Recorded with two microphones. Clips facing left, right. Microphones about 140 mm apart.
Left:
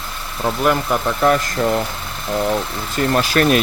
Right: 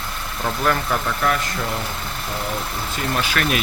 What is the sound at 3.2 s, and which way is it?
Speech, 40° left (ahead or behind).